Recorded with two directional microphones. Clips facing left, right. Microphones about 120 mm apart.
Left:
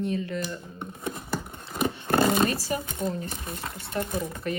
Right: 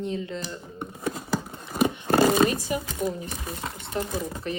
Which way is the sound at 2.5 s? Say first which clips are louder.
Right 1 dB; 15° right (ahead or behind).